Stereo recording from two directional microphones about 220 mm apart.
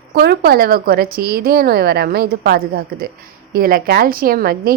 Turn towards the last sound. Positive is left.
turn(degrees=-45)  # may be behind; listen again after turning